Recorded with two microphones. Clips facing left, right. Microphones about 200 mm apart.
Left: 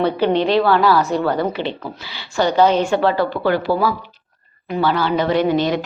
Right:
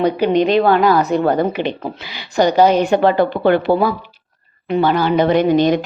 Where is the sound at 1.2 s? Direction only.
50° right (ahead or behind).